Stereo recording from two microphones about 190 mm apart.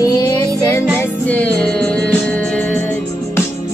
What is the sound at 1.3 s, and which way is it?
Music, 5° left (ahead or behind).